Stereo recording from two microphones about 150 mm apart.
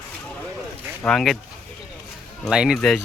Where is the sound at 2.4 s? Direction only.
5° right (ahead or behind).